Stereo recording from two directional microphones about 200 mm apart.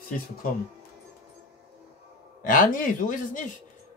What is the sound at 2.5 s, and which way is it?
Speech, 40° left (ahead or behind).